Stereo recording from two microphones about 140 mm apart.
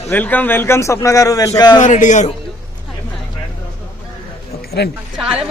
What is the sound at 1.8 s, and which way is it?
Speech, 60° left (ahead or behind).